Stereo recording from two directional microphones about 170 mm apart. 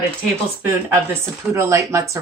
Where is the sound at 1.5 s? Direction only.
15° right (ahead or behind).